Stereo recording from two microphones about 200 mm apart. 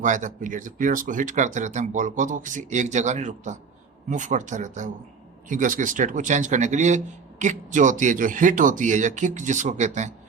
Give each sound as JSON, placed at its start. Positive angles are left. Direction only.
{"t": 0.0, "sound": "a man's voice", "side_deg": -40}